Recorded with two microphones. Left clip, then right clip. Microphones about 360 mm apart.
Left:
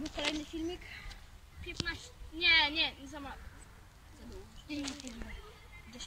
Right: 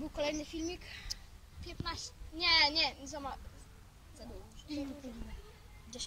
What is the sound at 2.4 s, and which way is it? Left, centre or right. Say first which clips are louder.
Speech: left 1 dB; centre.